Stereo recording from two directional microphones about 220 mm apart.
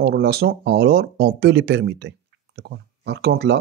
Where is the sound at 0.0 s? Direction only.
45° right (ahead or behind).